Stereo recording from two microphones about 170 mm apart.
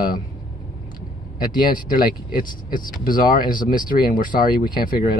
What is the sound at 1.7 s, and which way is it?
Speech, 55° left (ahead or behind).